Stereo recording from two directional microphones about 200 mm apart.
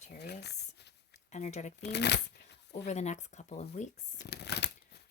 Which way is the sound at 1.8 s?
55° left (ahead or behind).